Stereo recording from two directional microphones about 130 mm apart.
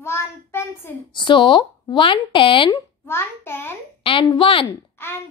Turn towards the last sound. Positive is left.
turn(degrees=20)  # may be behind; listen again after turning